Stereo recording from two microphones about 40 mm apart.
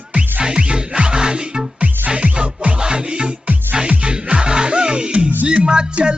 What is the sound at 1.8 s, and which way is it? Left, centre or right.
Music, right.